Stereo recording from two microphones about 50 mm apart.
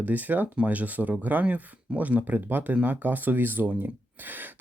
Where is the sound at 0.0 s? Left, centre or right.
Right.